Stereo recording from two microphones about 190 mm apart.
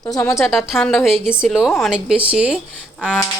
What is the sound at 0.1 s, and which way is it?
Speech, 15° left (ahead or behind).